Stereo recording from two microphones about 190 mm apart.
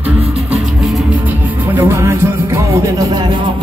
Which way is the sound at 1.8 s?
15° right (ahead or behind).